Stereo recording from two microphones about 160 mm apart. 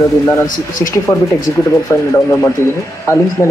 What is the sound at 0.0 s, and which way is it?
Speech, 15° left (ahead or behind).